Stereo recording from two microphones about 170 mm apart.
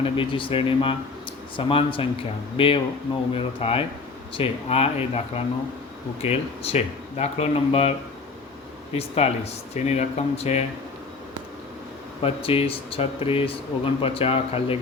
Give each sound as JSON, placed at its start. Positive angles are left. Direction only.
{"t": 0.0, "sound": "speech", "side_deg": 30}
{"t": 6.2, "sound": "speech", "side_deg": 35}
{"t": 12.2, "sound": "speech", "side_deg": 35}